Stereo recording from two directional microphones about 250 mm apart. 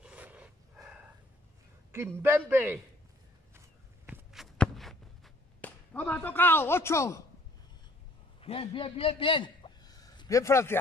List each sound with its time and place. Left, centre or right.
0.0 s dog: centre
1.9 s a man's voice: centre
3.5 s walk: centre
8.4 s a man's voice: left